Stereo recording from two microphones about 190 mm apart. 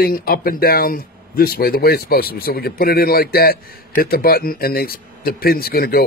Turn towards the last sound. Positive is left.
turn(degrees=55)  # may be behind; listen again after turning